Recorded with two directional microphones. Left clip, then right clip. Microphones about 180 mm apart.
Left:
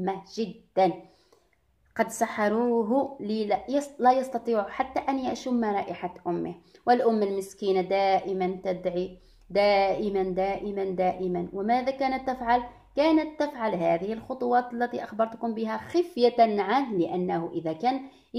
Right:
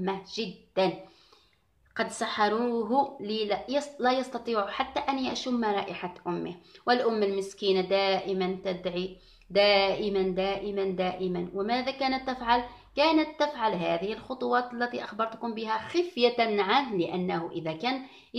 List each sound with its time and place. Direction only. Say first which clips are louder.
0.0 s speech: left 2 dB; 50° left (ahead or behind)
2.0 s speech: left 1 dB; 55° left (ahead or behind)